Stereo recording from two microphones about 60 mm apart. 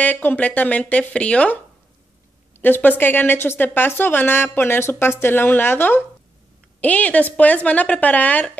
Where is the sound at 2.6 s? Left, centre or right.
Left.